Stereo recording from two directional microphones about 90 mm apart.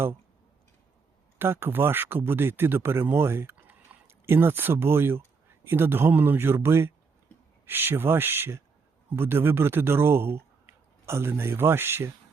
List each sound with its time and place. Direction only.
1.4 s speech: 25° right (ahead or behind)